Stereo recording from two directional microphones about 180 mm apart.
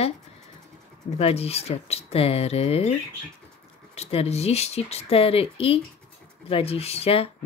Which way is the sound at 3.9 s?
35° left (ahead or behind).